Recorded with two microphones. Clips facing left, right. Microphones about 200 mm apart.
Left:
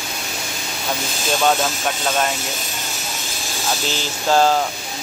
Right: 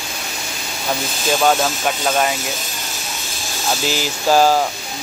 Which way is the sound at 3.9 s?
10° right (ahead or behind).